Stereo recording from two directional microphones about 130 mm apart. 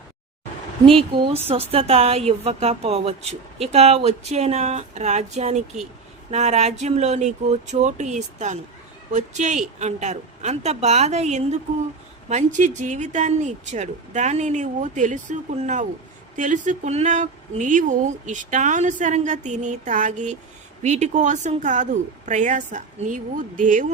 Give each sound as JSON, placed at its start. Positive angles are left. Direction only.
{"t": 0.9, "sound": "a woman's voice", "side_deg": -40}
{"t": 12.3, "sound": "speech", "side_deg": -70}
{"t": 16.3, "sound": "speech", "side_deg": -75}
{"t": 17.6, "sound": "speech", "side_deg": -80}